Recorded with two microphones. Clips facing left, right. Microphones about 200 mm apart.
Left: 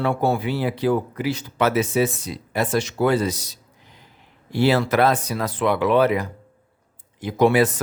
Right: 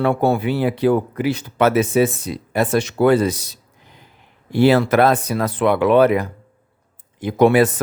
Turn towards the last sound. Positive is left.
turn(degrees=-55)  # may be behind; listen again after turning